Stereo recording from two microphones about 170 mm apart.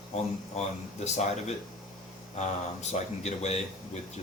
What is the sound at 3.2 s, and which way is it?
Speech, 40° left (ahead or behind).